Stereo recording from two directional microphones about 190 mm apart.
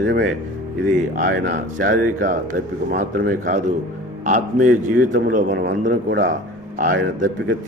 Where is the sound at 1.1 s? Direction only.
40° right (ahead or behind).